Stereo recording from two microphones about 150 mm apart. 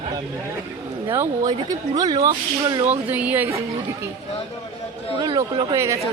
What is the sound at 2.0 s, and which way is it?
Speech, 25° right (ahead or behind).